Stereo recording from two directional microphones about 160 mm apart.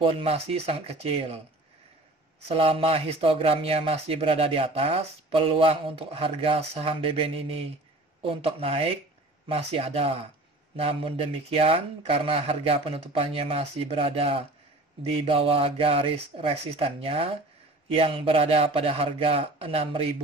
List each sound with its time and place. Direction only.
0.0 s speech: 35° right (ahead or behind)
2.4 s speech: 35° right (ahead or behind)